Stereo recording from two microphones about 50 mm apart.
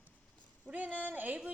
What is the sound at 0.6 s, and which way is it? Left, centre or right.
Speech, right.